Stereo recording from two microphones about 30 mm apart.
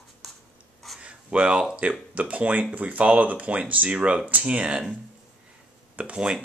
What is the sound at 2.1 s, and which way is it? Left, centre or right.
Speech, right.